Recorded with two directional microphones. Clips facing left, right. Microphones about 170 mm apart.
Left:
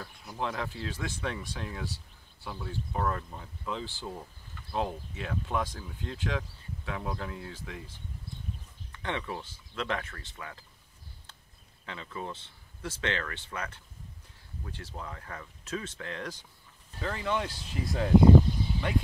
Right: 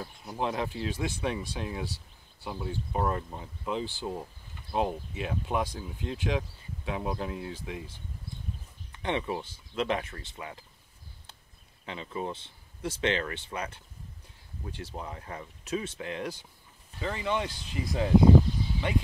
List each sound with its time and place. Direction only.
0.0 s speech: 20° right (ahead or behind)
8.9 s speech: 20° right (ahead or behind)
11.8 s speech: 20° right (ahead or behind)
17.0 s speech: 5° right (ahead or behind)